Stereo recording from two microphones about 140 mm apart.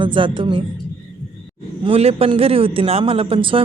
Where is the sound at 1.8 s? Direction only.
45° right (ahead or behind).